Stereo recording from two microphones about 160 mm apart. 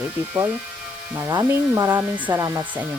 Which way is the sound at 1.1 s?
15° right (ahead or behind).